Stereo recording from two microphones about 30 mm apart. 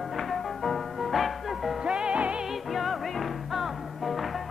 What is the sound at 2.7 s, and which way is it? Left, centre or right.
Music, centre.